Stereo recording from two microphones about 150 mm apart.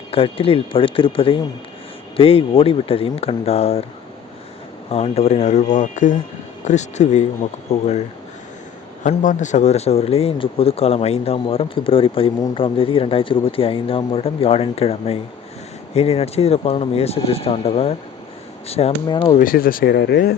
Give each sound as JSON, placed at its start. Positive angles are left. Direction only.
{"t": 0.1, "sound": "speech", "side_deg": 40}
{"t": 4.9, "sound": "speech", "side_deg": 45}
{"t": 9.0, "sound": "speech", "side_deg": 55}
{"t": 19.0, "sound": "speech", "side_deg": 30}
{"t": 19.4, "sound": "speech", "side_deg": 70}